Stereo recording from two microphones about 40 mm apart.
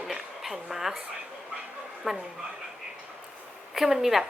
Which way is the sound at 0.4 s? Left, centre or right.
Centre.